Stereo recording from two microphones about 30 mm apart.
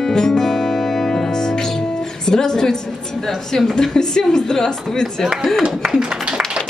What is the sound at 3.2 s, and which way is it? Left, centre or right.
A woman's voice, centre.